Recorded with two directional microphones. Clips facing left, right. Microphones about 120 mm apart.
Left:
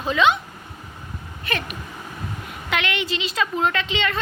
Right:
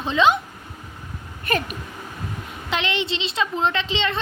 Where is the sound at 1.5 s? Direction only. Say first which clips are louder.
Right 4 dB; 40° right (ahead or behind).